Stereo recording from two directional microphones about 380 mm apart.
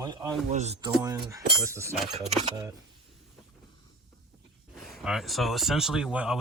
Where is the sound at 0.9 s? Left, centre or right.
Centre.